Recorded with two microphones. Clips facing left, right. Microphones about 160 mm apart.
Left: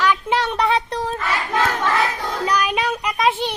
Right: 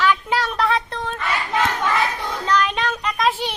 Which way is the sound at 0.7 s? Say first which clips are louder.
Left 3 dB; 35° left (ahead or behind).